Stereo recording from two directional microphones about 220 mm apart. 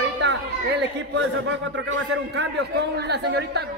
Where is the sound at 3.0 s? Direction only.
50° right (ahead or behind).